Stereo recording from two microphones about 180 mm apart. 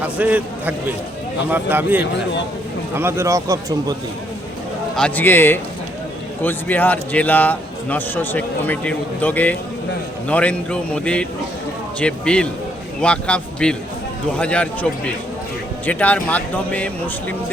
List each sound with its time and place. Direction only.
0.0 s a man's voice: 10° right (ahead or behind)
4.9 s a man's voice: 5° left (ahead or behind)